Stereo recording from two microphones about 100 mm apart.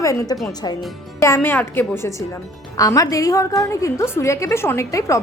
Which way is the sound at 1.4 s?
20° left (ahead or behind).